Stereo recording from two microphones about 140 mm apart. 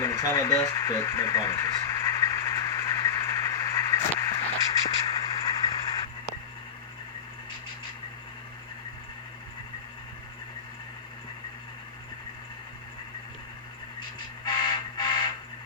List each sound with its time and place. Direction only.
0.0 s radio: 25° left (ahead or behind)
4.4 s vehicle: 25° left (ahead or behind)
14.4 s a sound: 30° left (ahead or behind)